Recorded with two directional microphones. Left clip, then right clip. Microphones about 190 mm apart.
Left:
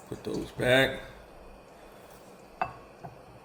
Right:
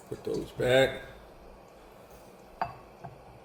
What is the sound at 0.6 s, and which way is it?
Speech, 40° left (ahead or behind).